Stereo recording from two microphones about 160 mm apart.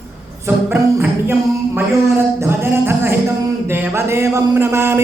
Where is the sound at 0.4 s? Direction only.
15° right (ahead or behind).